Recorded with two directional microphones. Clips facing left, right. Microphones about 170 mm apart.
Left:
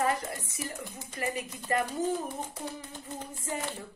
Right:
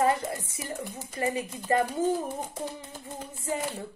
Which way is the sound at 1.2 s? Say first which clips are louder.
Right 5 dB; 25° right (ahead or behind).